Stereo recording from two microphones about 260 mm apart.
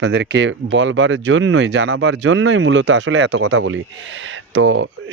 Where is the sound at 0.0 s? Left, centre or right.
Right.